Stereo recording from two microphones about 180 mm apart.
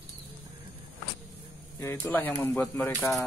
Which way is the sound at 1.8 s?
15° left (ahead or behind).